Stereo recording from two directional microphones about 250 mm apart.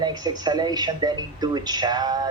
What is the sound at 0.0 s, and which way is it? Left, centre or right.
A man's voice, centre.